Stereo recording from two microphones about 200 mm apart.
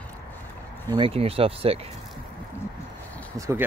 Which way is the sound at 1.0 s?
30° right (ahead or behind).